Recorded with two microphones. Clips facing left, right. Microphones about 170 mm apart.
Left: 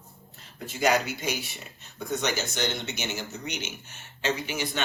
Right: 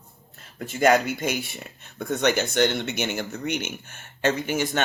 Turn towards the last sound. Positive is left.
turn(degrees=-50)  # may be behind; listen again after turning